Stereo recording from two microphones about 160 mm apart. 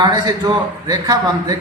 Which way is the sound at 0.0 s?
25° right (ahead or behind).